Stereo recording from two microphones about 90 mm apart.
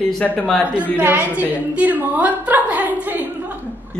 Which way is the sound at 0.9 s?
20° right (ahead or behind).